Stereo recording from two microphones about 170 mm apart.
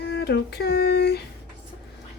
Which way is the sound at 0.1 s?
75° left (ahead or behind).